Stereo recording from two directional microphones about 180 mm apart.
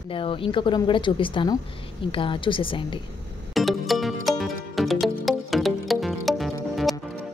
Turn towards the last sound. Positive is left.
turn(degrees=0)  # may be behind; listen again after turning